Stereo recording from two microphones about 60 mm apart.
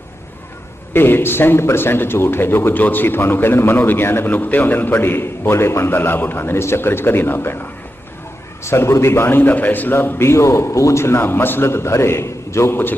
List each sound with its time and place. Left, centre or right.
0.9 s a man's voice: left